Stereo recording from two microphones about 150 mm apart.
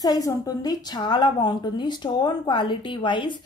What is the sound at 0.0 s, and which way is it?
Speech, 25° left (ahead or behind).